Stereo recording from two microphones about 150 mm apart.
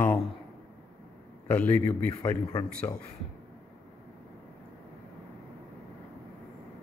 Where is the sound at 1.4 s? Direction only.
10° left (ahead or behind).